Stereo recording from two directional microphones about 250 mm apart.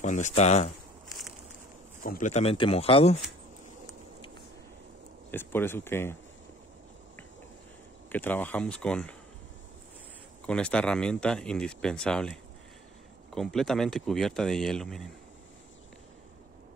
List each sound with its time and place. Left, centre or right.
0.0 s speech: left
2.0 s speech: left
5.3 s speech: centre
8.1 s speech: centre
10.4 s speech: centre
13.3 s speech: centre